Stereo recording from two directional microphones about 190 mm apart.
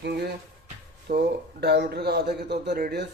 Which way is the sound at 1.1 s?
45° right (ahead or behind).